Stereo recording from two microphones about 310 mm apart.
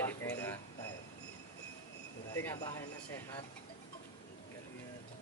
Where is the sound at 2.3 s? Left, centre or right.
Centre.